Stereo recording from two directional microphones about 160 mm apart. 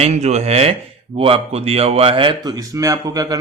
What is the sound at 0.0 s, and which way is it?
Speech, 45° right (ahead or behind).